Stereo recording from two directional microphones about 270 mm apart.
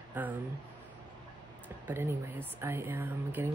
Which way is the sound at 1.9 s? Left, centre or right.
Centre.